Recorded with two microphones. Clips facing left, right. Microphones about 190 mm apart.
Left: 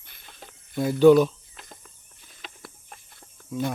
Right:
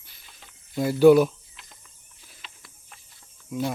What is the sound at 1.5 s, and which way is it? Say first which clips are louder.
Insect: left 6 dB; 50° left (ahead or behind).